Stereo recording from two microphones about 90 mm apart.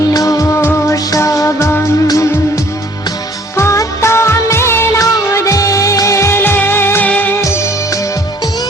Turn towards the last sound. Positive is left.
turn(degrees=20)  # may be behind; listen again after turning